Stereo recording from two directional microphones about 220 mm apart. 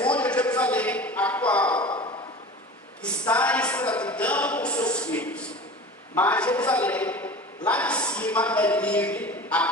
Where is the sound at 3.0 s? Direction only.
5° left (ahead or behind).